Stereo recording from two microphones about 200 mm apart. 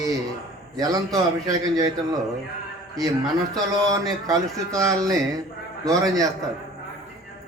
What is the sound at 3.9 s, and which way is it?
A man's voice, 15° right (ahead or behind).